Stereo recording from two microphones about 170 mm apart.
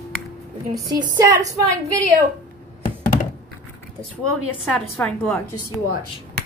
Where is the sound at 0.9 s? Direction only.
20° right (ahead or behind).